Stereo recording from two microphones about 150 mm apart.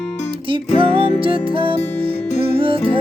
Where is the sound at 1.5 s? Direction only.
35° right (ahead or behind).